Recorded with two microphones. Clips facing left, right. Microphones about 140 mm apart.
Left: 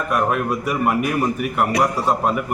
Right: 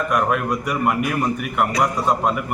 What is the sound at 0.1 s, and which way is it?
A man's voice, 5° left (ahead or behind).